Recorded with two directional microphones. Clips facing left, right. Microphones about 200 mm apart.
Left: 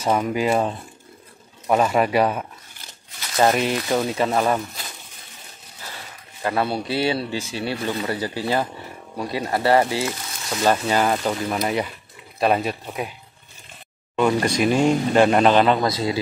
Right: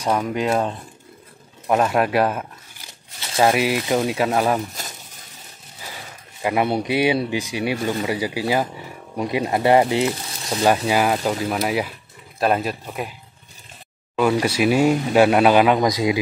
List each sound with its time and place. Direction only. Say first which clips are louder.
0.0 s speech: left 1 dB; 5° left (ahead or behind)
4.8 s a sound: right 2 dB; 45° right (ahead or behind)
6.4 s speech: right 3 dB; 15° right (ahead or behind); by 13.1 s centre (ahead or behind)
14.1 s speech: right 1 dB; 5° right (ahead or behind)